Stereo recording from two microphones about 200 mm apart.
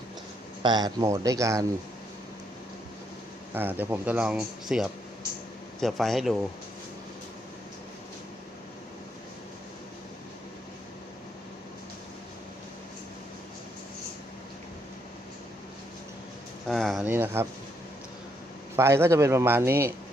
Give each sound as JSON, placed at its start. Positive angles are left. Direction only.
{"t": 0.6, "sound": "speech", "side_deg": -20}
{"t": 3.5, "sound": "speech", "side_deg": -10}
{"t": 16.6, "sound": "speech", "side_deg": 0}
{"t": 17.1, "sound": "speech", "side_deg": -10}
{"t": 18.8, "sound": "speech", "side_deg": -15}